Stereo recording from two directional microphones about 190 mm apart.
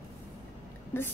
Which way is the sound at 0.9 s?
10° left (ahead or behind).